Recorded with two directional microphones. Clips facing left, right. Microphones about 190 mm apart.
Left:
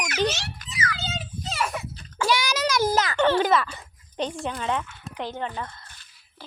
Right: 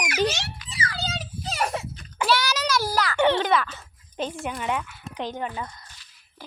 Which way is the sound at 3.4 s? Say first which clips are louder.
Left 1 dB; centre (ahead or behind).